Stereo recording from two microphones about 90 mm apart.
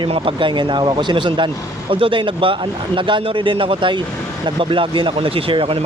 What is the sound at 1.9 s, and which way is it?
A man's voice, 80° right.